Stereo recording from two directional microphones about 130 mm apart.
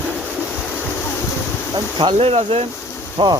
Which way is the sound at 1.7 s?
35° right (ahead or behind).